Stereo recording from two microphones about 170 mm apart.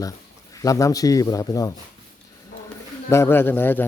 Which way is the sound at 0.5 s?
20° left (ahead or behind).